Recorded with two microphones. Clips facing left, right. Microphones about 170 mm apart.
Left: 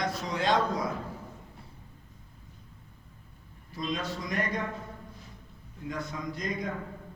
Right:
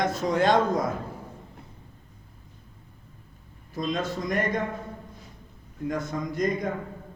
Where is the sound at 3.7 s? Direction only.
50° right (ahead or behind).